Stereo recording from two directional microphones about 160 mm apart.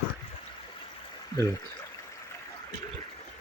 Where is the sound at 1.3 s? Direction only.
25° left (ahead or behind).